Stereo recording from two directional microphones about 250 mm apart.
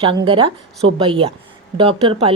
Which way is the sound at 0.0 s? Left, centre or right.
Right.